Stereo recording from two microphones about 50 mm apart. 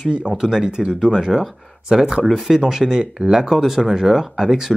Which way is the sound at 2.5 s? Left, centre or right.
Centre.